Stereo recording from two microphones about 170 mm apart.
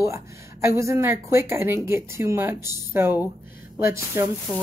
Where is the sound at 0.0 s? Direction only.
15° right (ahead or behind).